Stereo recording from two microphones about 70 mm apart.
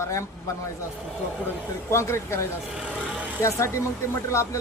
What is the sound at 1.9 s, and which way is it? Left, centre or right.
A man's voice, left.